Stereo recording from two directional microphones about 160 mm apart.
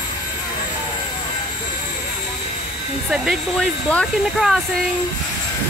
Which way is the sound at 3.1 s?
5° right (ahead or behind).